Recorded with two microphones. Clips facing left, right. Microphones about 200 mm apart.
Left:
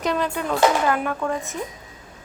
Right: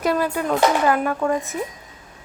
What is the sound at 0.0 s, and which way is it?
Speech, 5° right (ahead or behind).